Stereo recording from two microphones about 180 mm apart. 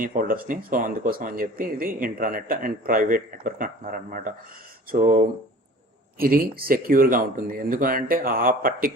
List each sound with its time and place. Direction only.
0.0 s speech: 50° right (ahead or behind)